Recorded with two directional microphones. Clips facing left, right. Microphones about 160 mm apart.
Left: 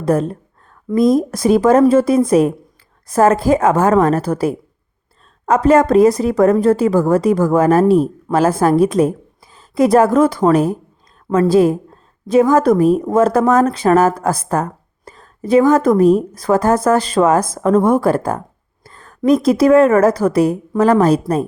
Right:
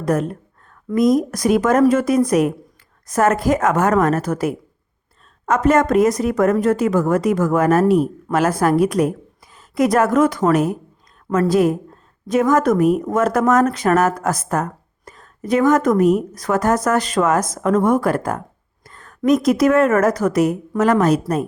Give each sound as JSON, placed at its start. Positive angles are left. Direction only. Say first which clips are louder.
{"t": 0.0, "sound": "a woman's voice", "louder": "left 3 dB", "side_deg": 30}